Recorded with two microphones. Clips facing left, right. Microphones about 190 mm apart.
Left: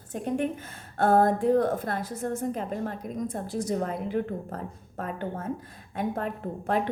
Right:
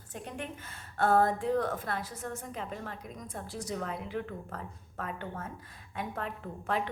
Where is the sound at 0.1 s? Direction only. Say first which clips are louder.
Left 12 dB; 45° left (ahead or behind).